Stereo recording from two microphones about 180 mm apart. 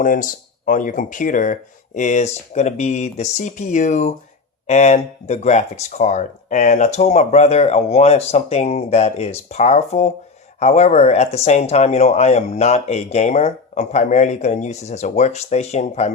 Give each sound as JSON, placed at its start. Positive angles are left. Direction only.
{"t": 0.0, "sound": "speech", "side_deg": 50}